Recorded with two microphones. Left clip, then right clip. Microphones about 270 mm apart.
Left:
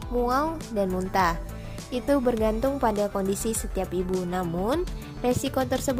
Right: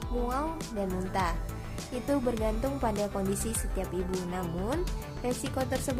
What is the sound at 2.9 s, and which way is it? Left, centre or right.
Speech, centre.